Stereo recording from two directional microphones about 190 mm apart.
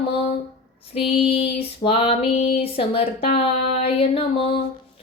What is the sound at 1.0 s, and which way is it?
Female singing, 30° left (ahead or behind).